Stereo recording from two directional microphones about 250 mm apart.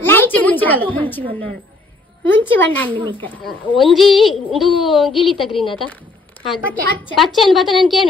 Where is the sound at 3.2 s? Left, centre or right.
Centre.